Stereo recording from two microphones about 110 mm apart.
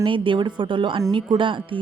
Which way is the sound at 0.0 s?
50° right (ahead or behind).